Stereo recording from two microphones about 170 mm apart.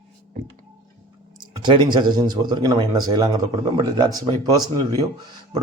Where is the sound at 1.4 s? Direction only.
25° right (ahead or behind).